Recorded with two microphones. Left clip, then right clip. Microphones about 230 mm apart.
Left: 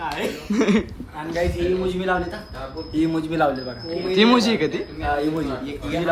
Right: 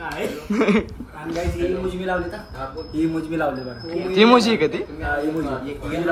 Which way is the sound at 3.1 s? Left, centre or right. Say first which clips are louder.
Left 2 dB; left.